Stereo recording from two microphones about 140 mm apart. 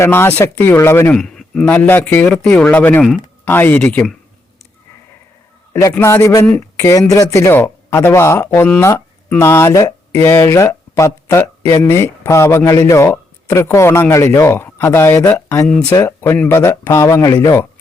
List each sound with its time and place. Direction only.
0.0 s a man's voice: 15° left (ahead or behind)
1.1 s a man's voice: 5° left (ahead or behind)
6.0 s speech: 20° left (ahead or behind)
15.6 s a man's voice: 10° left (ahead or behind)
16.0 s speech: 20° left (ahead or behind)